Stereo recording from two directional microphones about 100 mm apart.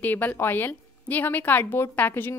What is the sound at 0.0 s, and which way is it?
A woman's voice, 20° left (ahead or behind).